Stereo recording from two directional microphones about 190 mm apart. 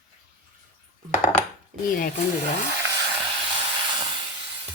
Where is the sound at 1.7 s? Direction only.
45° right (ahead or behind).